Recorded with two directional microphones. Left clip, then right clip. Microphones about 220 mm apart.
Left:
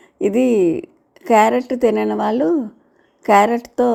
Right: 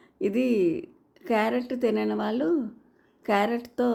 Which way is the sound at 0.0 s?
25° left (ahead or behind).